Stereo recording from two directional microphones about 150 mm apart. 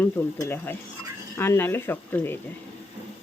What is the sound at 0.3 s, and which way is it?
Speech, 15° left (ahead or behind).